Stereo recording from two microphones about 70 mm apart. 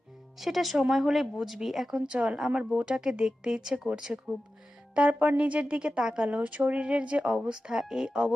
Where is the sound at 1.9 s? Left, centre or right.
Centre.